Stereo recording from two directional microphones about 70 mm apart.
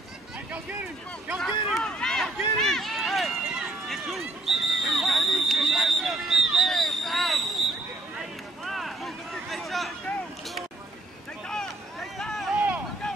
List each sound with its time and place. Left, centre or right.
0.5 s speech: centre
1.4 s run: centre
3.9 s a sound: centre
11.4 s vehicle: centre
12.5 s vehicle: right